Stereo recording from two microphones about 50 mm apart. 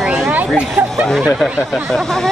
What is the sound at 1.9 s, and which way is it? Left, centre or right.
Speech, centre.